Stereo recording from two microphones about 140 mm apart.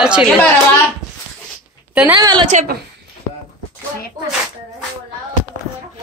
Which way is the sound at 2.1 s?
30° right (ahead or behind).